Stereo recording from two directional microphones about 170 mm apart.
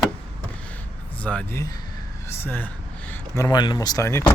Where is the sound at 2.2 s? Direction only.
15° left (ahead or behind).